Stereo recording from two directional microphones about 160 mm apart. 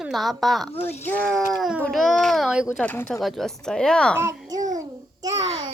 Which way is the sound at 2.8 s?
10° left (ahead or behind).